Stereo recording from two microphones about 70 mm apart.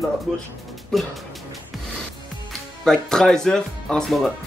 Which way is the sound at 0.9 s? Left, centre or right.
Centre.